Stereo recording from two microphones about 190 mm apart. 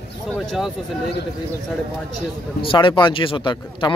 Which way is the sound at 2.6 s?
25° left (ahead or behind).